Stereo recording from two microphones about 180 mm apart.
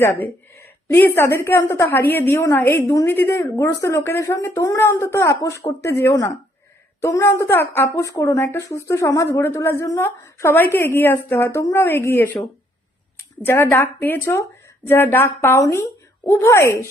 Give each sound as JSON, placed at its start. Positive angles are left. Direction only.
{"t": 0.0, "sound": "a woman's voice", "side_deg": 10}
{"t": 13.4, "sound": "a woman's voice", "side_deg": 10}